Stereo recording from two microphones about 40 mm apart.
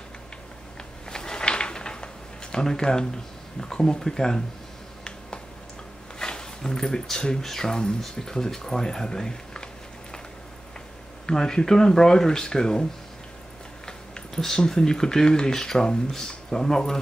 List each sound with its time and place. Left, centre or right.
1.1 s a sound: centre
2.5 s speech: centre
6.1 s speech: centre
11.2 s speech: centre
13.8 s speech: centre